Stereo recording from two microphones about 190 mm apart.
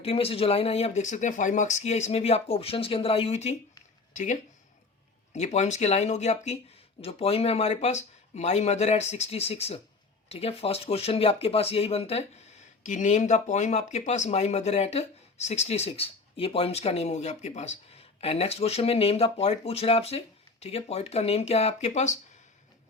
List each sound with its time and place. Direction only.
0.0 s speech: 30° left (ahead or behind)